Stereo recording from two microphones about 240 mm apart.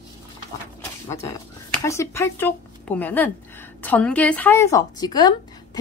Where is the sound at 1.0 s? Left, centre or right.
Centre.